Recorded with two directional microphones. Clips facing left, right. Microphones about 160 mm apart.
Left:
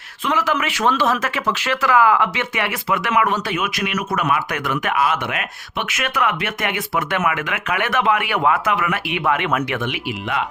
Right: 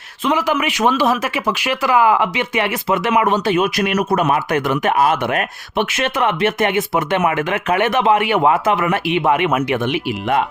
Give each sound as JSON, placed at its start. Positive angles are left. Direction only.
{"t": 0.3, "sound": "speech", "side_deg": -15}
{"t": 4.9, "sound": "speech", "side_deg": -35}